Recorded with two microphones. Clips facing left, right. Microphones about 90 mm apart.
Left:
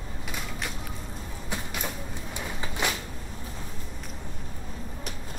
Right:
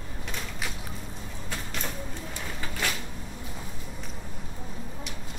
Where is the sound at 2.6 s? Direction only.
20° left (ahead or behind).